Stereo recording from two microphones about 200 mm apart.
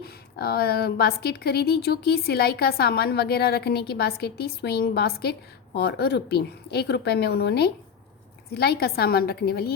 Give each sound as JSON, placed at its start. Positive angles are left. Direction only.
{"t": 0.0, "sound": "a woman's voice", "side_deg": 50}